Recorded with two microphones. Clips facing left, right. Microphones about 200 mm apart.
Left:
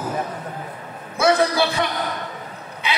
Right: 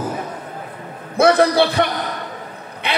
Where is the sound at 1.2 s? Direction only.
60° right (ahead or behind).